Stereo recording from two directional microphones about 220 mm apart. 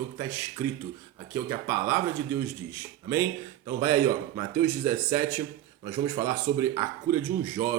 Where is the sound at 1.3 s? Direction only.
10° right (ahead or behind).